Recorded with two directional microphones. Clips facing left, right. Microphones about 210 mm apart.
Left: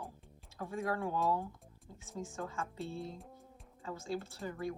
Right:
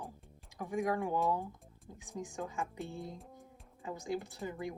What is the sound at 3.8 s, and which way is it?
Speech, 15° right (ahead or behind).